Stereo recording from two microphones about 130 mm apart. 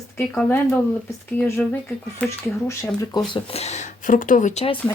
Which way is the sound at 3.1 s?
30° left (ahead or behind).